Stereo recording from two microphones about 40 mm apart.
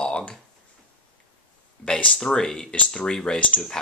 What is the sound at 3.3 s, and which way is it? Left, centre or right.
Speech, left.